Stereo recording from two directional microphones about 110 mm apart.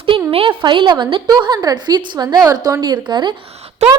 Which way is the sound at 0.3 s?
55° right (ahead or behind).